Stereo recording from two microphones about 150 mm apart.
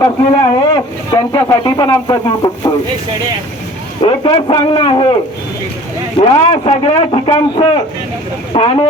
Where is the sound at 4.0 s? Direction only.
35° left (ahead or behind).